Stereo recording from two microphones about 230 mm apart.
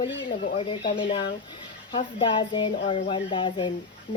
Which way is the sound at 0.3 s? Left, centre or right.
Left.